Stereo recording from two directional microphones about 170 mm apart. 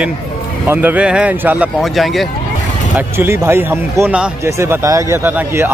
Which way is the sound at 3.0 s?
15° right (ahead or behind).